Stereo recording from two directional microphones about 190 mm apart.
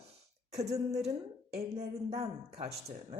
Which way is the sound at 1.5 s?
35° right (ahead or behind).